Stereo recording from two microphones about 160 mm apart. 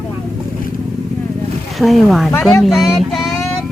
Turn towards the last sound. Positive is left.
turn(degrees=0)  # may be behind; listen again after turning